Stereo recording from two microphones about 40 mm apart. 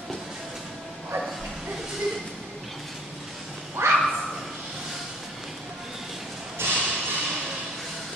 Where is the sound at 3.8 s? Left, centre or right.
Right.